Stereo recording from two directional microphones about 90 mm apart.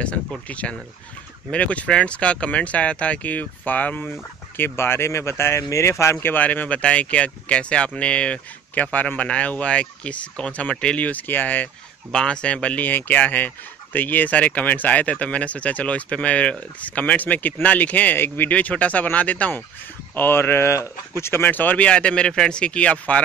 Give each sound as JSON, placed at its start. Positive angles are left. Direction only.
{"t": 0.0, "sound": "speech", "side_deg": 15}
{"t": 6.2, "sound": "speech", "side_deg": 20}